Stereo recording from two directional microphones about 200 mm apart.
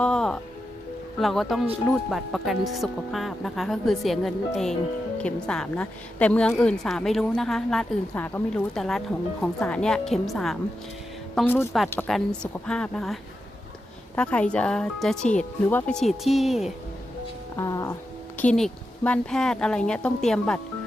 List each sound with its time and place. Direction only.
0.0 s music: 5° left (ahead or behind)
1.2 s speech: centre (ahead or behind)
14.2 s speech: 5° left (ahead or behind)
17.6 s speech: 15° left (ahead or behind)
18.3 s speech: 5° left (ahead or behind)